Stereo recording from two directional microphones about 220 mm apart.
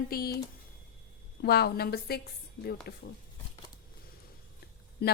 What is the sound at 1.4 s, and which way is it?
Speech, 45° left (ahead or behind).